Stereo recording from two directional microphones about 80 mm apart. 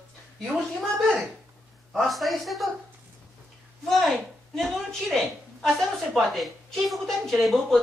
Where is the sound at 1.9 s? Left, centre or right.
Centre.